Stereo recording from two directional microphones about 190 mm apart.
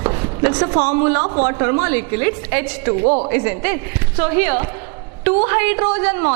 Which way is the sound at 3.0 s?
40° right (ahead or behind).